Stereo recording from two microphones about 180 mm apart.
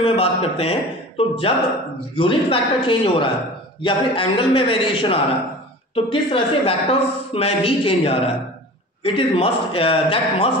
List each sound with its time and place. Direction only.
0.0 s a man's voice: 30° left (ahead or behind)